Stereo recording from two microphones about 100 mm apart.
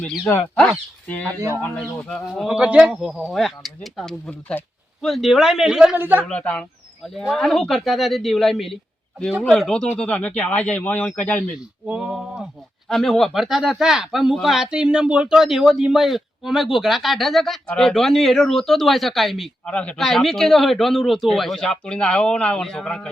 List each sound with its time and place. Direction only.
0.3 s speech: 20° left (ahead or behind)
2.0 s speech: 10° left (ahead or behind)
2.3 s speech: 5° right (ahead or behind)
4.3 s speech: 15° left (ahead or behind)
5.0 s speech: centre (ahead or behind)
6.0 s speech: 20° right (ahead or behind)
6.2 s speech: 10° left (ahead or behind)
11.9 s speech: 10° right (ahead or behind); by 23.0 s 5° left (ahead or behind)